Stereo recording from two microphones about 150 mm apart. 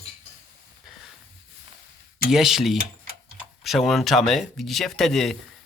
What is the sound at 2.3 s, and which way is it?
Speech, 5° right (ahead or behind).